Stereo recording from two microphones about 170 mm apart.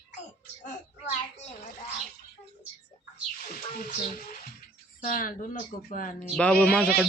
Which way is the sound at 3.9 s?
55° left (ahead or behind).